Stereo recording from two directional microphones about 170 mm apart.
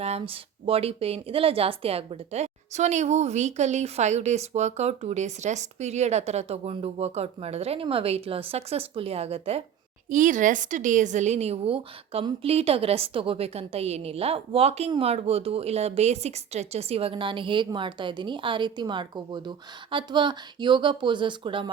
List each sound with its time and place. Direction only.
0.0 s a woman's voice: 35° right (ahead or behind)
10.1 s a woman's voice: 50° right (ahead or behind); by 21.7 s 30° right (ahead or behind)